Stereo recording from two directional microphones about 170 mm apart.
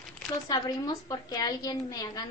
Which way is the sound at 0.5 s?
25° left (ahead or behind).